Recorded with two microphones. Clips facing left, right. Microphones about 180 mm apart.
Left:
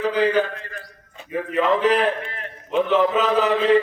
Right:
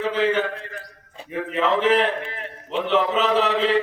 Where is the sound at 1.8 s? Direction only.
25° right (ahead or behind).